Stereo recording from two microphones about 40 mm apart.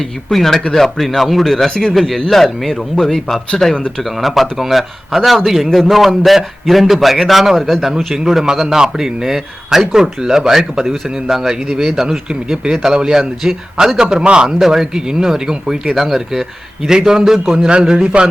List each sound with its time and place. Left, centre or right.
0.0 s a man's voice: centre
4.0 s a man's voice: centre